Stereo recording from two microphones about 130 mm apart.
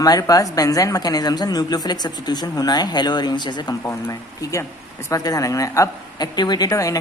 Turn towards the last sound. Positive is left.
turn(degrees=25)  # may be behind; listen again after turning